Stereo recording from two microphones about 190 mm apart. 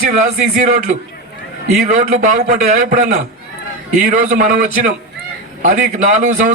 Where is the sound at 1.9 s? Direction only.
40° right (ahead or behind).